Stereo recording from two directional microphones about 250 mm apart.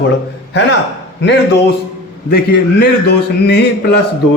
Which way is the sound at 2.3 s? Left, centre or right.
Left.